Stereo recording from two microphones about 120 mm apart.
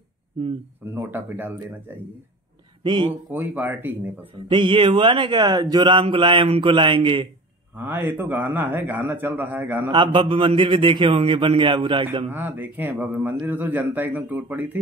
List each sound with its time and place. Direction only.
0.4 s speech: 50° right (ahead or behind)
0.8 s a man's voice: 20° right (ahead or behind)
2.8 s speech: 40° right (ahead or behind)
3.3 s a man's voice: 15° right (ahead or behind)
4.5 s speech: 45° right (ahead or behind)
7.7 s a man's voice: 15° right (ahead or behind)
9.8 s speech: 40° right (ahead or behind)
12.3 s a man's voice: 15° right (ahead or behind)